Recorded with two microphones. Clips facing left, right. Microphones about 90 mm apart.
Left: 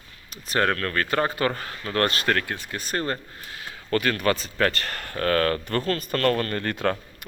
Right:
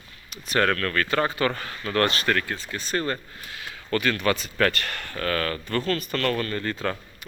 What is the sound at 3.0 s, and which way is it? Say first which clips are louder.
Speech: even; 35° left (ahead or behind).